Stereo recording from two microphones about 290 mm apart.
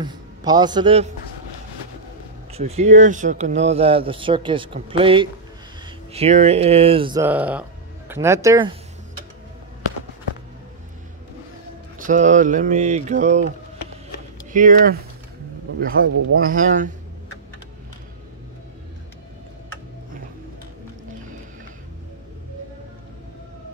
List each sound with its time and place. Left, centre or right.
0.0 s a man's voice: centre
2.5 s speech: right
12.0 s speech: right
14.5 s speech: right